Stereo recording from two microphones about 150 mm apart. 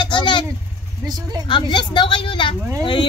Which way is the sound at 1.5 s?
30° left (ahead or behind).